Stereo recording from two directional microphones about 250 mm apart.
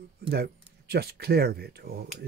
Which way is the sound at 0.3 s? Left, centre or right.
Right.